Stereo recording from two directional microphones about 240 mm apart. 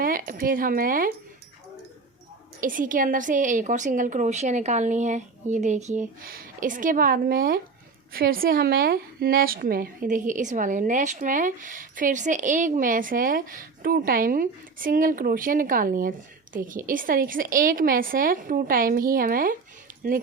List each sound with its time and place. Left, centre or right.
0.0 s speech: right
2.6 s speech: right
19.9 s a sound: right